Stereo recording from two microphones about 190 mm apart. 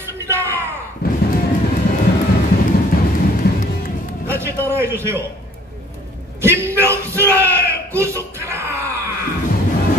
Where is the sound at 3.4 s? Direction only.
55° left (ahead or behind).